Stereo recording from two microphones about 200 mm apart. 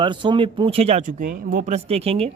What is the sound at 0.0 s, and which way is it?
Speech, 25° right (ahead or behind).